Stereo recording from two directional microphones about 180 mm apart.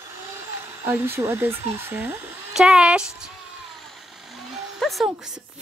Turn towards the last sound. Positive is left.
turn(degrees=-5)  # may be behind; listen again after turning